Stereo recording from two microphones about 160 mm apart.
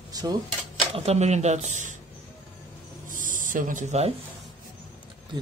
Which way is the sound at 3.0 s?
55° right (ahead or behind).